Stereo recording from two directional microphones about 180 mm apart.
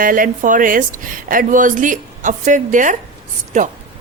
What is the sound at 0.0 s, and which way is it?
A woman's voice, 50° right (ahead or behind).